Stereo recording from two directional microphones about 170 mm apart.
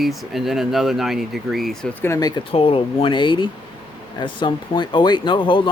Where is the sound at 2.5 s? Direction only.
35° left (ahead or behind).